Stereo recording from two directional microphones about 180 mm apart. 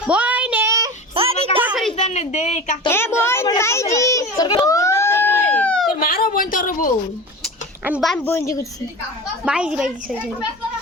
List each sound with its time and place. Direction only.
0.1 s child singing: 5° right (ahead or behind)
1.1 s a sound: 30° right (ahead or behind)
1.6 s a sound: 5° right (ahead or behind)
1.9 s speech: 35° left (ahead or behind)
2.9 s children playing: 15° left (ahead or behind)
6.0 s speech: 55° left (ahead or behind)
7.9 s speech: 5° right (ahead or behind)
8.1 s a woman's voice: 15° left (ahead or behind)
9.4 s a child's voice: 5° right (ahead or behind)